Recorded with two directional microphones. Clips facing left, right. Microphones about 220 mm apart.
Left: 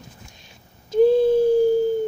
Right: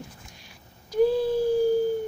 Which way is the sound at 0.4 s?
25° left (ahead or behind).